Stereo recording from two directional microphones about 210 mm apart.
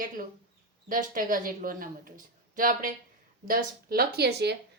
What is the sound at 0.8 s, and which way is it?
A woman's voice, 40° right (ahead or behind).